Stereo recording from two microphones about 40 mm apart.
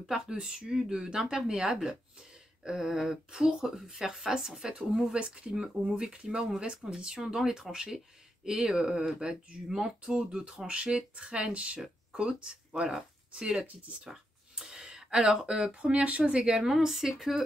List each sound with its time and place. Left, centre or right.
0.0 s speech: centre
0.8 s speech: centre
16.6 s speech: centre